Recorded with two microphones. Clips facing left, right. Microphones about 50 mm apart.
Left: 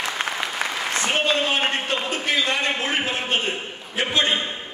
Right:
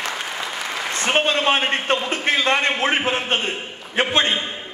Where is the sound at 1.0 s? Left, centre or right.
Right.